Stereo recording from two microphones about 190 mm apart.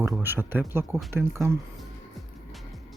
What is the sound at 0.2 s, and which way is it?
Speech, 10° right (ahead or behind).